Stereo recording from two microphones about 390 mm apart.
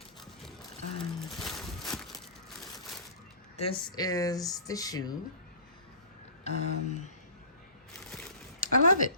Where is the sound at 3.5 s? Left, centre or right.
Centre.